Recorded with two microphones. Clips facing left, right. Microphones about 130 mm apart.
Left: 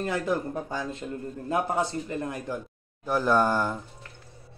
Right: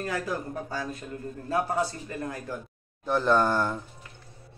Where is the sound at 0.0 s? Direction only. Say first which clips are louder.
Left 3 dB; 25° left (ahead or behind).